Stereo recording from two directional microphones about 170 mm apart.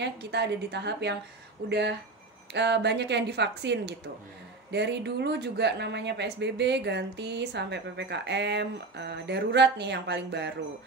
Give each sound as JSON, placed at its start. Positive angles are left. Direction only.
{"t": 0.0, "sound": "a woman's voice", "side_deg": -80}